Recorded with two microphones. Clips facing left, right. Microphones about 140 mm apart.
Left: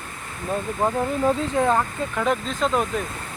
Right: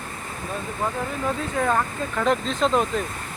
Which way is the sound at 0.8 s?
40° left (ahead or behind).